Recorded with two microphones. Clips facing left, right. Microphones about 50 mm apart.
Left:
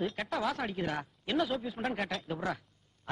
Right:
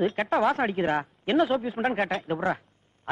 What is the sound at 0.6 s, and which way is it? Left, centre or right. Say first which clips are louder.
Speech: right 9 dB; right.